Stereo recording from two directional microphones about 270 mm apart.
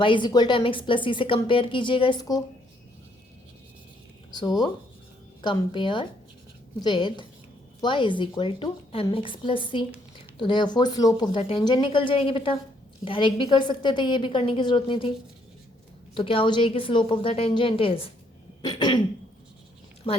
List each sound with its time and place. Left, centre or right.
0.0 s a woman's voice: centre
4.3 s a woman's voice: centre
16.1 s a woman's voice: centre
20.1 s a woman's voice: centre